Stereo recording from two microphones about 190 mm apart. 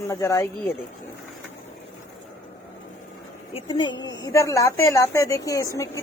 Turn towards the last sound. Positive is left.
turn(degrees=15)  # may be behind; listen again after turning